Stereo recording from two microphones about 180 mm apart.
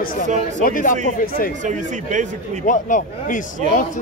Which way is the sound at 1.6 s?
45° right (ahead or behind).